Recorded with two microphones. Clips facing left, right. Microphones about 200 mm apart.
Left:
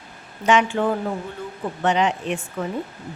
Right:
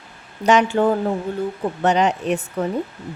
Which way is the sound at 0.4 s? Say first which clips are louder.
Right 3 dB; 40° right (ahead or behind).